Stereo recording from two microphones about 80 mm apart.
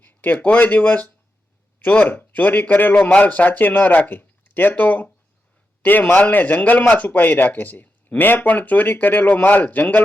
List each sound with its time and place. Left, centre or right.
0.0 s a man's voice: left